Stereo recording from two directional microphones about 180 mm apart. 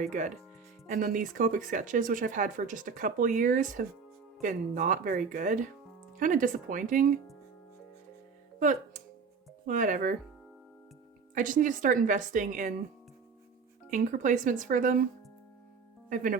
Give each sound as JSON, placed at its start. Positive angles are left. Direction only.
{"t": 0.0, "sound": "speech", "side_deg": -45}
{"t": 8.5, "sound": "music", "side_deg": -45}
{"t": 9.6, "sound": "speech", "side_deg": -45}
{"t": 11.3, "sound": "speech", "side_deg": -45}
{"t": 13.9, "sound": "speech", "side_deg": -45}
{"t": 16.0, "sound": "speech", "side_deg": -50}